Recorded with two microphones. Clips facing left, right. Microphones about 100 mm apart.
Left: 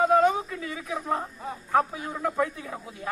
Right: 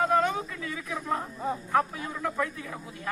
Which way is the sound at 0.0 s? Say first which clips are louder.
Left 4 dB; 20° left (ahead or behind).